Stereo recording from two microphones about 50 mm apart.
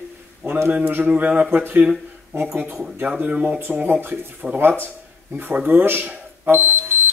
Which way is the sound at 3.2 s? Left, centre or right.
Right.